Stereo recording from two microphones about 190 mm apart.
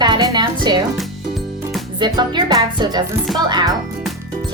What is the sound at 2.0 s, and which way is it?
Speech, 25° right (ahead or behind).